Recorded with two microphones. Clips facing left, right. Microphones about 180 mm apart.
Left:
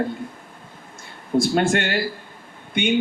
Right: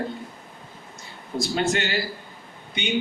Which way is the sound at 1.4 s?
55° left (ahead or behind).